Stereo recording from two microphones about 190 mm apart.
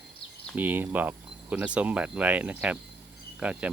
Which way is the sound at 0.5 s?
10° right (ahead or behind).